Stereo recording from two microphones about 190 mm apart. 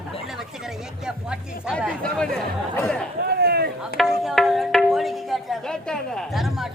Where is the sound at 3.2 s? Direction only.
55° right (ahead or behind).